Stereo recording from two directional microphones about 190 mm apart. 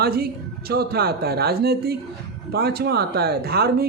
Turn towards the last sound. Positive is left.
turn(degrees=-55)  # may be behind; listen again after turning